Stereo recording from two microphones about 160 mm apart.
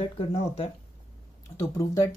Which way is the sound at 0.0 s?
40° left (ahead or behind).